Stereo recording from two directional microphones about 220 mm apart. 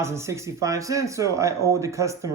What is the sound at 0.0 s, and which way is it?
Speech, 10° right (ahead or behind).